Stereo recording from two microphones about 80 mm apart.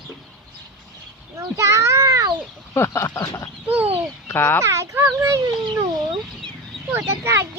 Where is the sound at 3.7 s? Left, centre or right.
Right.